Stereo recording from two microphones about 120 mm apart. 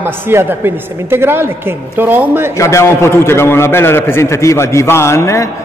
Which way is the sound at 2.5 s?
25° left (ahead or behind).